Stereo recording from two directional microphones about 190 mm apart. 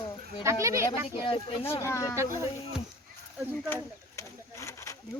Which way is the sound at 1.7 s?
15° left (ahead or behind).